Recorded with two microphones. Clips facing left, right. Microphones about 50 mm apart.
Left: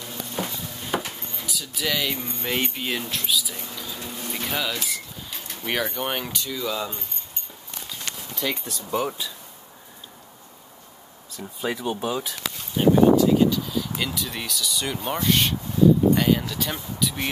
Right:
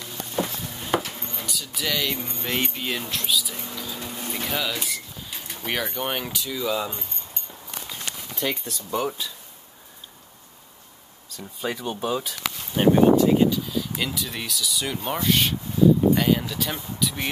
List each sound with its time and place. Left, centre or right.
0.4 s a sound: centre
1.3 s a sound: centre
2.4 s speech: centre
8.4 s speech: centre
11.3 s speech: centre
12.7 s speech: right
13.3 s speech: centre
13.7 s speech: centre